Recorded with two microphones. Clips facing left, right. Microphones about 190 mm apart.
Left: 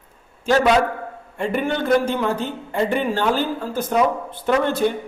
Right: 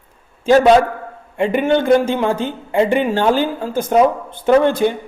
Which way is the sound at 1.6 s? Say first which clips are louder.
Right 7 dB; 25° right (ahead or behind).